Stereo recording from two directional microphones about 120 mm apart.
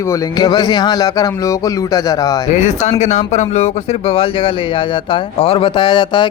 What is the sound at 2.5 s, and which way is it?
Speech, 70° left (ahead or behind).